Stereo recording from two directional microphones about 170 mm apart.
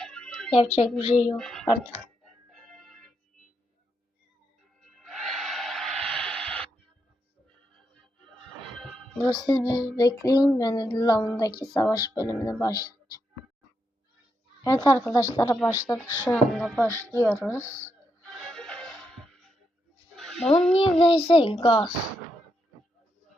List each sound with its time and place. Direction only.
0.0 s music: 5° left (ahead or behind)
0.5 s a child's voice: 35° left (ahead or behind)
1.4 s speech: 5° left (ahead or behind)
2.5 s music: centre (ahead or behind)
4.9 s a sound: centre (ahead or behind)
9.2 s music: 25° left (ahead or behind)
14.6 s a woman's voice: 20° left (ahead or behind)
15.1 s music: 20° left (ahead or behind)
15.9 s speech: 5° left (ahead or behind)
16.8 s speech: 15° left (ahead or behind)
18.3 s music: centre (ahead or behind)
20.1 s a sound: centre (ahead or behind)
20.7 s a child's voice: 30° left (ahead or behind)